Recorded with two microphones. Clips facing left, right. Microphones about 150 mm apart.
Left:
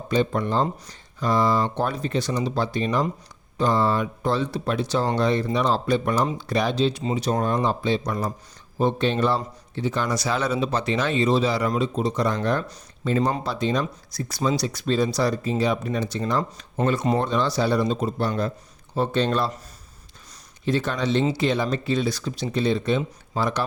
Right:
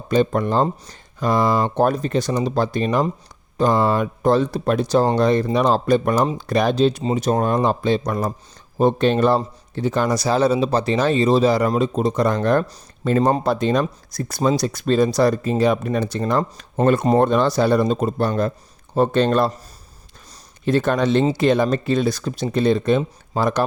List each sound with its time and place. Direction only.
0.1 s speech: 45° right (ahead or behind)
20.7 s speech: 50° right (ahead or behind)